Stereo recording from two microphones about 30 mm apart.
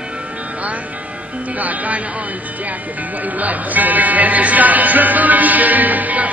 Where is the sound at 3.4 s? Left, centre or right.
Right.